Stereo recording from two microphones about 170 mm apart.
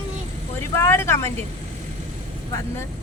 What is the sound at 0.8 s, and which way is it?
Speech, 15° left (ahead or behind).